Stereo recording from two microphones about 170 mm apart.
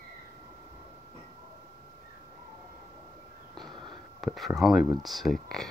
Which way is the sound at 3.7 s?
30° right (ahead or behind).